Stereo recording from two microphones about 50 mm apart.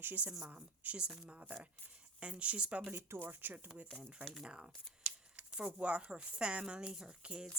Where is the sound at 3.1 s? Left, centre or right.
Right; by 5.1 s centre.